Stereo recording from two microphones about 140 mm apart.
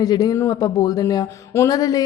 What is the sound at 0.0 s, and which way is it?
A woman's voice, 30° left (ahead or behind).